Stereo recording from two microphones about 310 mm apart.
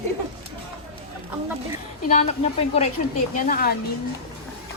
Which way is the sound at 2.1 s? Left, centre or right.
Left.